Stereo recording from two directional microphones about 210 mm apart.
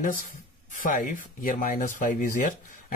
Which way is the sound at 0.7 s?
40° left (ahead or behind).